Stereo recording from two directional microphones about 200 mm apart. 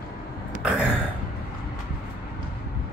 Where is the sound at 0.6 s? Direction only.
Centre (ahead or behind).